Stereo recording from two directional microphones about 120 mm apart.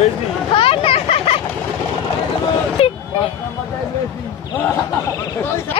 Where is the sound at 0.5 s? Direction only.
50° left (ahead or behind).